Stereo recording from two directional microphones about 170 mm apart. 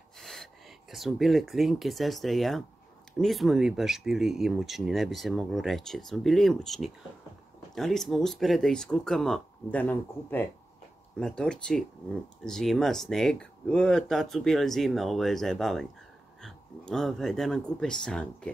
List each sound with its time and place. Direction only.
0.2 s speech: centre (ahead or behind)